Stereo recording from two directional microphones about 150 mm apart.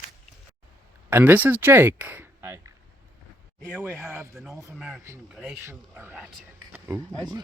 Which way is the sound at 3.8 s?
15° right (ahead or behind).